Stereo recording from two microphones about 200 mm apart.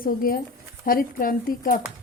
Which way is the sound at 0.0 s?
45° left (ahead or behind).